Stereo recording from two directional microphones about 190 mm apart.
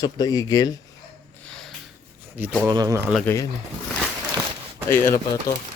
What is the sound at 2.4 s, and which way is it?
Speech, 10° right (ahead or behind).